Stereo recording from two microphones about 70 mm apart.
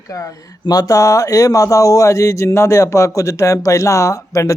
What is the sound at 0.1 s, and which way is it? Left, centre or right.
Speech, left.